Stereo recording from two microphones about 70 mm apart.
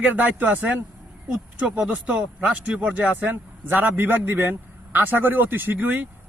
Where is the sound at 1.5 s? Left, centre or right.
Centre.